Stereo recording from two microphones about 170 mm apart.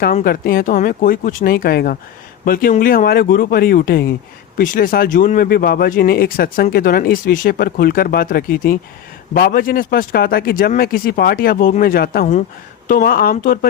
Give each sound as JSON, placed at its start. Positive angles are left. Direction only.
{"t": 0.0, "sound": "speech", "side_deg": 60}